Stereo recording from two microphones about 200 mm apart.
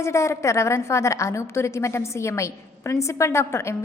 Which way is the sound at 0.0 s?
15° left (ahead or behind).